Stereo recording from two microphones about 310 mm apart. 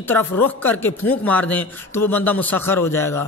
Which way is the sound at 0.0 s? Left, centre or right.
Centre.